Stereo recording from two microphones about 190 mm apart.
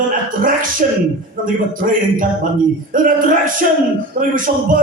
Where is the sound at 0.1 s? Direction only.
45° right (ahead or behind).